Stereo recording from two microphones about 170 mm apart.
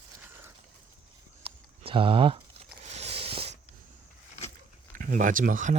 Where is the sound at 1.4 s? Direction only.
35° right (ahead or behind).